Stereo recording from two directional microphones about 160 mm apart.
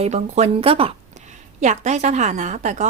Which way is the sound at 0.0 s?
45° right (ahead or behind).